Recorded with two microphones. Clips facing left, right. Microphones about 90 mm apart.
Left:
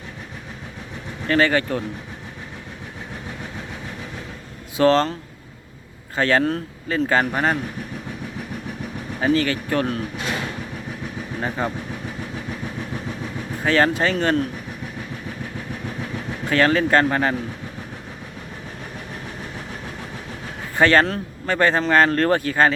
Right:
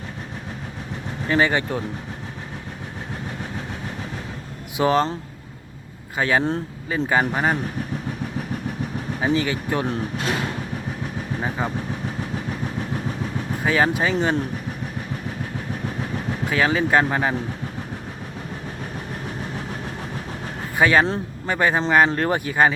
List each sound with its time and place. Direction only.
1.3 s speech: 15° right (ahead or behind)
4.8 s speech: 15° right (ahead or behind)
6.1 s speech: 10° right (ahead or behind)
9.2 s speech: 15° right (ahead or behind)
11.3 s speech: 5° right (ahead or behind)
13.7 s speech: 10° right (ahead or behind)
16.5 s speech: 10° right (ahead or behind)
20.7 s speech: 10° right (ahead or behind)